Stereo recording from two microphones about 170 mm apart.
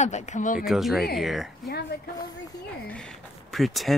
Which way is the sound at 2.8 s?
5° left (ahead or behind).